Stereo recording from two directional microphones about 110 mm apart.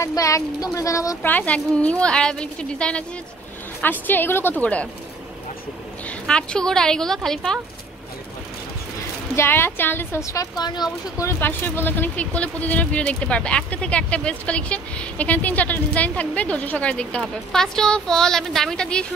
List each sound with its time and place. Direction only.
0.0 s a woman's voice: 30° left (ahead or behind)
1.2 s speech: 15° left (ahead or behind)
6.0 s a woman's voice: 10° left (ahead or behind)
9.3 s a woman's voice: 20° left (ahead or behind); by 11.2 s 40° left (ahead or behind)
11.2 s speech: 20° left (ahead or behind)